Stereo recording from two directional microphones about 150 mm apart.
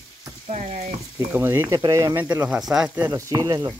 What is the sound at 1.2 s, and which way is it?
Speech, 15° right (ahead or behind).